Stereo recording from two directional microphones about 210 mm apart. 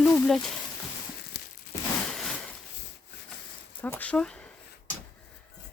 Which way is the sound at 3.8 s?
10° left (ahead or behind).